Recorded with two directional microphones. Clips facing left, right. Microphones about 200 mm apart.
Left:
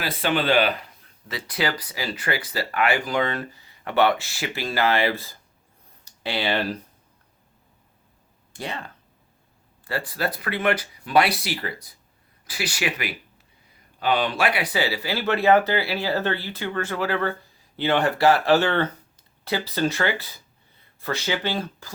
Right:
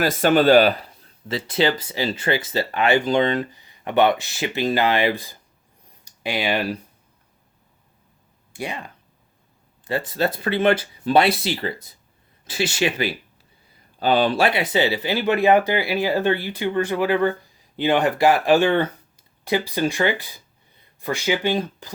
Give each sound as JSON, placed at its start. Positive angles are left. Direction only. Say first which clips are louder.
{"t": 0.0, "sound": "speech", "louder": "right 8 dB", "side_deg": -45}
{"t": 8.5, "sound": "speech", "louder": "right 2 dB", "side_deg": -15}